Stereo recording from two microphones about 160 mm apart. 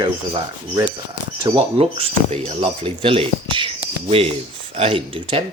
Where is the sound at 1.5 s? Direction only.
40° right (ahead or behind).